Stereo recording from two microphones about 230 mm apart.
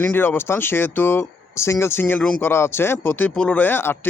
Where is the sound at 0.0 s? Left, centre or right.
Centre.